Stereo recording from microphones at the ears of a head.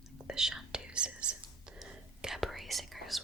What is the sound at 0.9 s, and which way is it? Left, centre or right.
Whispering, right.